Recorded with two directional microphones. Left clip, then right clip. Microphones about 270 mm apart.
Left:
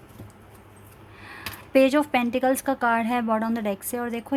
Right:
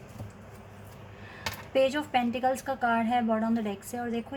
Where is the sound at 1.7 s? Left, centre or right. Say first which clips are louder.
Left 6 dB; left.